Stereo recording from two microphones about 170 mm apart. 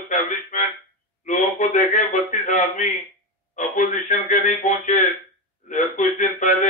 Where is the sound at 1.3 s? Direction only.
45° left (ahead or behind).